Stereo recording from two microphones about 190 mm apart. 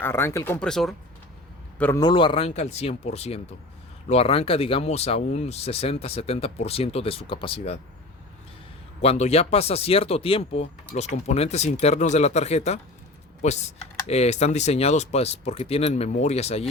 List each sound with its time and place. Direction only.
0.0 s speech: 15° left (ahead or behind)
1.8 s speech: 15° left (ahead or behind)
2.0 s speech: 25° left (ahead or behind)
9.0 s speech: 35° left (ahead or behind)